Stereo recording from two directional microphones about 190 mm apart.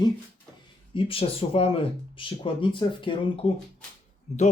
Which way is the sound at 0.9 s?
30° left (ahead or behind).